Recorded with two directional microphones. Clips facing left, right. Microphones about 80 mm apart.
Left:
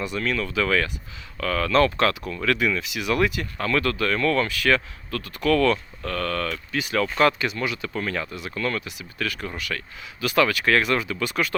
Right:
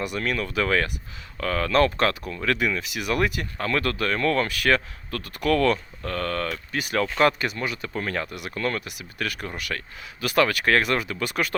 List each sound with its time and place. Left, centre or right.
0.2 s speech: right
2.6 s speech: right
3.6 s speech: right
4.4 s speech: right
8.8 s speech: right